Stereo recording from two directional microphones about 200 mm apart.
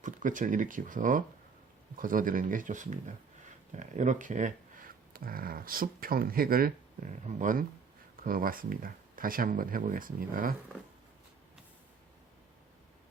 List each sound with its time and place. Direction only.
0.0 s speech: 40° right (ahead or behind)